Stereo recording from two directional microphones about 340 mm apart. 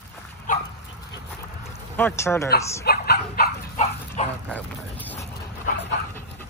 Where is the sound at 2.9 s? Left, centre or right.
Left.